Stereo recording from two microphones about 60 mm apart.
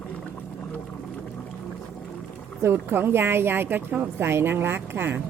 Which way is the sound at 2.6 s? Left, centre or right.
Right.